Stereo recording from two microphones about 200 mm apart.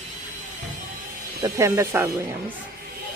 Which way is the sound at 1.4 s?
15° right (ahead or behind).